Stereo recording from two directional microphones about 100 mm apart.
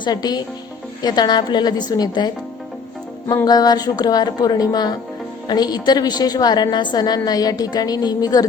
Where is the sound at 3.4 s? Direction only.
40° left (ahead or behind).